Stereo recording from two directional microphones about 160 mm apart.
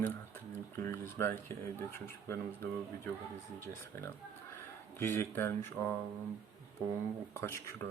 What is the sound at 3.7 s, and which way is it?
Speech, 20° left (ahead or behind).